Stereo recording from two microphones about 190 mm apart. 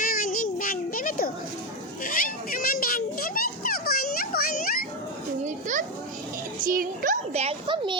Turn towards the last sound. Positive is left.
turn(degrees=-30)  # may be behind; listen again after turning